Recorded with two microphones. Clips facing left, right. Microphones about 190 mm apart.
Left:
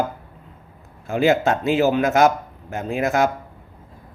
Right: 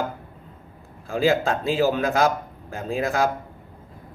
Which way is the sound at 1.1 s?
30° right (ahead or behind).